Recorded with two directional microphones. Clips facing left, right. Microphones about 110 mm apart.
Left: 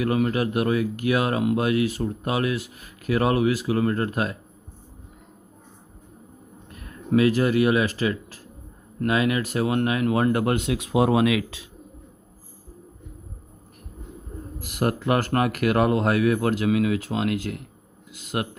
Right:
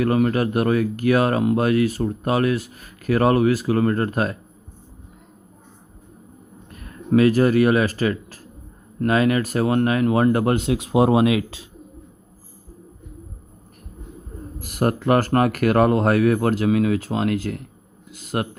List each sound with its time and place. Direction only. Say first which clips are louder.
0.0 s speech: right 4 dB; 40° right (ahead or behind)
7.1 s speech: right 4 dB; 40° right (ahead or behind)
14.6 s speech: right 3 dB; 40° right (ahead or behind)